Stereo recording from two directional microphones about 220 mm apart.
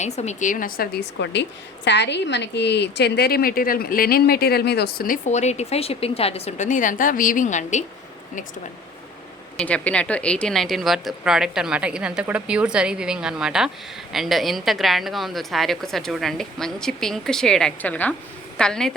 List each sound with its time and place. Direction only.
0.0 s a woman's voice: 30° left (ahead or behind)
1.2 s a woman's voice: 50° left (ahead or behind); by 7.9 s 35° left (ahead or behind)
9.6 s a woman's voice: 5° left (ahead or behind)